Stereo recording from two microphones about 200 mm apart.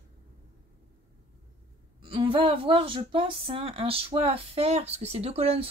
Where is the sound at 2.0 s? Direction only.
25° right (ahead or behind).